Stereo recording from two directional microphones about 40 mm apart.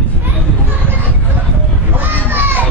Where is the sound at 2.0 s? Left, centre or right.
Right.